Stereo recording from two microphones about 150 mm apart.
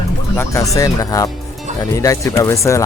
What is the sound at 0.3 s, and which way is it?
Speech, 20° left (ahead or behind).